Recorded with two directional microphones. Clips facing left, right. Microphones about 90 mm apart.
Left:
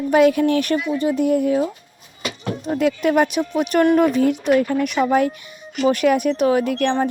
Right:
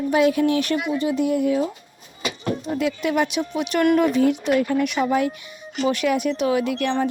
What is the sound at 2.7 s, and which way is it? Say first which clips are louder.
Speech: left 6 dB; 50° left (ahead or behind).